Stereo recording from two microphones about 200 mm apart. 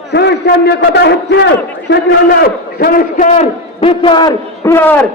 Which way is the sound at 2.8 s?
45° left (ahead or behind).